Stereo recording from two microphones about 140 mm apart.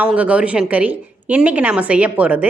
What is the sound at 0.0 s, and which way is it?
A woman's voice, 10° right (ahead or behind).